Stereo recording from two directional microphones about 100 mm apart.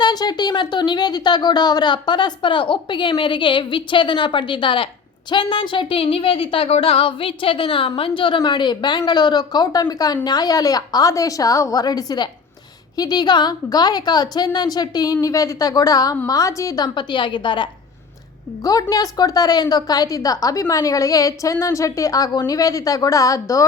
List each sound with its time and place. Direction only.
0.0 s a woman's voice: 45° left (ahead or behind)
18.6 s a woman's voice: 40° left (ahead or behind)